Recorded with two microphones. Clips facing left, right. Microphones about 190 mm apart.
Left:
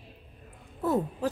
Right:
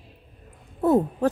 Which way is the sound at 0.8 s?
55° right (ahead or behind).